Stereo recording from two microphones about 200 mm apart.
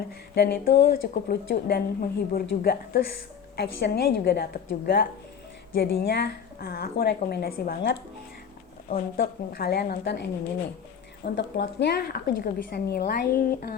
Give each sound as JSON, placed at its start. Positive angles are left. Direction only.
{"t": 0.3, "sound": "speech", "side_deg": 55}
{"t": 11.3, "sound": "speech", "side_deg": 60}